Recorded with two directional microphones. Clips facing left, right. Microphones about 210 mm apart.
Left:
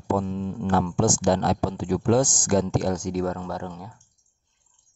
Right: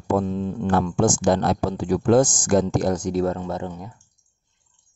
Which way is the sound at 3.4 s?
20° right (ahead or behind).